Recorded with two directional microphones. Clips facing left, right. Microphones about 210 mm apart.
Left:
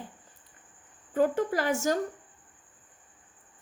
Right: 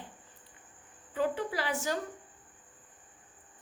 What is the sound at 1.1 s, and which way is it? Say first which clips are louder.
Speech: left 6 dB; 45° left (ahead or behind).